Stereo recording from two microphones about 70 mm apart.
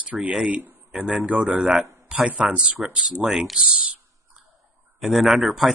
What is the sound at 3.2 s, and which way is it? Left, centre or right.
Speech, centre.